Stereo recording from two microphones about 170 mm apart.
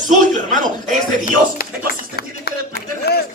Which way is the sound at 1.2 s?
60° left (ahead or behind).